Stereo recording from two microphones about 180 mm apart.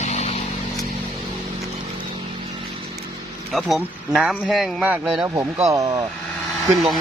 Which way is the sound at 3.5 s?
Centre (ahead or behind).